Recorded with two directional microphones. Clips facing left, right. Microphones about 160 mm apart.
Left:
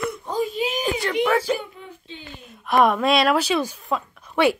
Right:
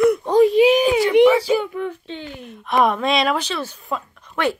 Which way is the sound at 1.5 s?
80° right.